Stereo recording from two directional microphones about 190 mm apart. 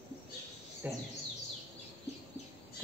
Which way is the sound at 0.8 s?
10° right (ahead or behind).